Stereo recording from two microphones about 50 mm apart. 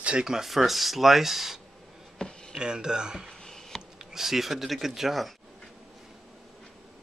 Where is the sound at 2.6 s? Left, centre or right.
Centre.